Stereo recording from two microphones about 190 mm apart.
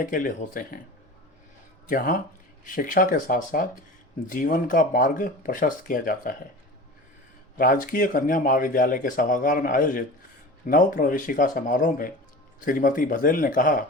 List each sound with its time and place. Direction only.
0.0 s speech: 45° left (ahead or behind)
1.9 s speech: 45° left (ahead or behind)
7.6 s speech: 45° left (ahead or behind)